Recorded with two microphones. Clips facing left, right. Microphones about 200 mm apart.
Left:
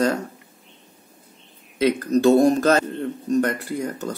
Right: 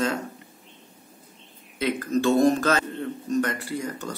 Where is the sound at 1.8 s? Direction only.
40° left (ahead or behind).